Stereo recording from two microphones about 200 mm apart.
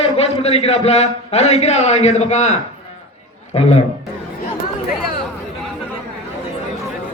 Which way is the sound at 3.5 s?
30° left (ahead or behind).